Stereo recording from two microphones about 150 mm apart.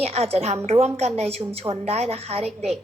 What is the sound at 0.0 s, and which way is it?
A woman's voice, 40° right (ahead or behind).